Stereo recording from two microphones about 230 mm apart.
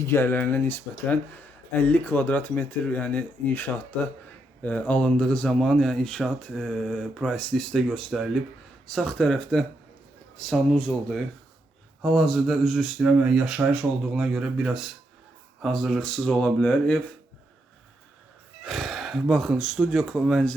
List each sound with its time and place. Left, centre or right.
0.0 s speech: centre
18.6 s speech: centre